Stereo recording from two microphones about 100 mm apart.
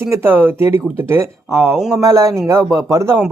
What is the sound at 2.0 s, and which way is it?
Speech, 30° right (ahead or behind).